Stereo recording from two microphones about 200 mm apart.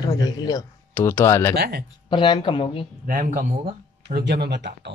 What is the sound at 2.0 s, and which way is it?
Speech, 25° left (ahead or behind).